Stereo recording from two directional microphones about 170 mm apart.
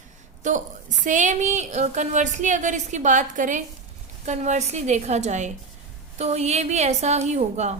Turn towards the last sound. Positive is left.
turn(degrees=-40)  # may be behind; listen again after turning